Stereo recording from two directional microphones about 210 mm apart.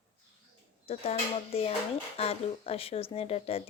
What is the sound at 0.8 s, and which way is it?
Speech, 30° left (ahead or behind).